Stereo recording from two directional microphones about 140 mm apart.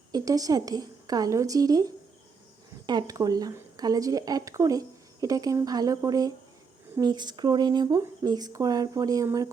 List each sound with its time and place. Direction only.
0.1 s a woman's voice: 25° right (ahead or behind)